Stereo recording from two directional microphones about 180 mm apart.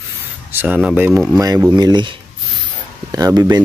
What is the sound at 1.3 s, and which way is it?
Speech, 20° right (ahead or behind).